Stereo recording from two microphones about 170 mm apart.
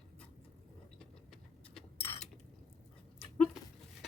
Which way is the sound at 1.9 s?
35° left (ahead or behind).